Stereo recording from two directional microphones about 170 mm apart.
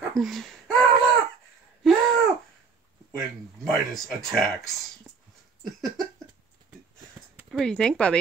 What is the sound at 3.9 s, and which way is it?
Speech, centre (ahead or behind).